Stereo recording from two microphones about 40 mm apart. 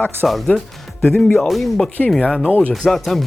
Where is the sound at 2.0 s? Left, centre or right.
Left.